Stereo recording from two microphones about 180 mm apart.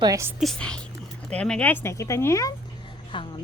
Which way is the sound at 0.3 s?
5° left (ahead or behind).